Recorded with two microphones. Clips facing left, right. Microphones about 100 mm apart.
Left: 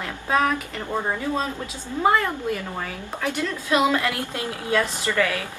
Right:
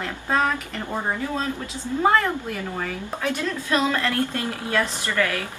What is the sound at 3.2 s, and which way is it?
A woman's voice, 15° left (ahead or behind).